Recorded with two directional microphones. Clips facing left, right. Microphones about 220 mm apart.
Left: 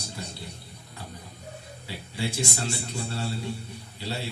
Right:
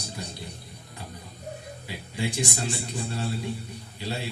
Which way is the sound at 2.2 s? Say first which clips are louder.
Right 1 dB; 15° right (ahead or behind).